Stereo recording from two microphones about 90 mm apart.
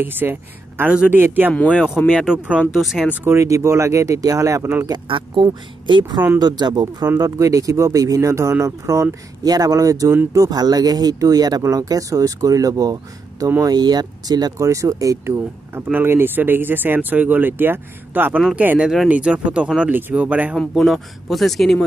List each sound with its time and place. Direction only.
0.0 s speech: 25° right (ahead or behind)
1.8 s speech: 15° left (ahead or behind)
2.1 s speech: 10° right (ahead or behind)
2.7 s speech: centre (ahead or behind)
3.3 s speech: 35° right (ahead or behind)
5.0 s speech: 70° right (ahead or behind)
5.5 s speech: 60° right (ahead or behind)
7.2 s speech: 35° right (ahead or behind)
14.6 s speech: 35° right (ahead or behind); by 20.5 s 15° right (ahead or behind)
20.5 s speech: centre (ahead or behind)